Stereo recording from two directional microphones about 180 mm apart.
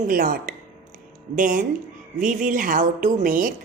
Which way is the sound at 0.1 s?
55° right (ahead or behind).